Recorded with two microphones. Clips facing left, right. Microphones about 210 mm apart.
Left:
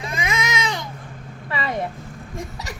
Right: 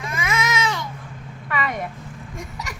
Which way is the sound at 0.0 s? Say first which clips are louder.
Right 1 dB; 15° left (ahead or behind).